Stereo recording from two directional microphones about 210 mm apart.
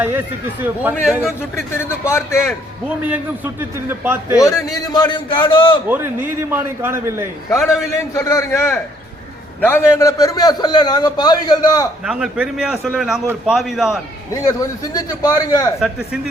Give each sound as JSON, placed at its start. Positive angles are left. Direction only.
{"t": 0.0, "sound": "a man's voice", "side_deg": -10}
{"t": 1.7, "sound": "a man's voice", "side_deg": 10}
{"t": 3.0, "sound": "a man's voice", "side_deg": -10}
{"t": 4.4, "sound": "a man's voice", "side_deg": 15}
{"t": 5.9, "sound": "a man's voice", "side_deg": -10}
{"t": 7.5, "sound": "a man's voice", "side_deg": 0}
{"t": 8.1, "sound": "a man's voice", "side_deg": 15}
{"t": 12.0, "sound": "a man's voice", "side_deg": -5}
{"t": 14.4, "sound": "a man's voice", "side_deg": 15}
{"t": 15.8, "sound": "a man's voice", "side_deg": -5}